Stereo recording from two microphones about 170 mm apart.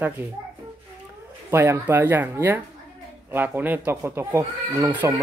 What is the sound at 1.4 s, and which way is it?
Speech, 15° right (ahead or behind).